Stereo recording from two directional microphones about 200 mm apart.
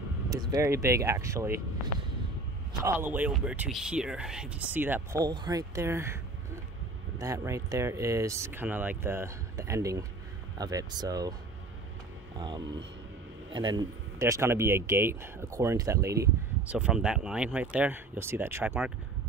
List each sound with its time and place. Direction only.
0.3 s speech: 20° right (ahead or behind)
2.8 s speech: 10° right (ahead or behind)
12.4 s speech: 20° right (ahead or behind)